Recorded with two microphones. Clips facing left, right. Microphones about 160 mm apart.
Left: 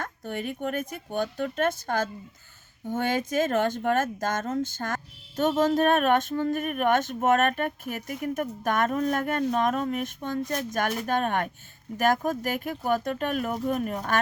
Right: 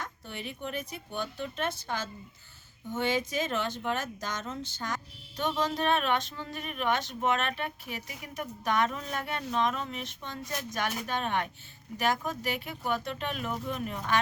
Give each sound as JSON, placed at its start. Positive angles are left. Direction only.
{"t": 0.0, "sound": "speech", "side_deg": 50}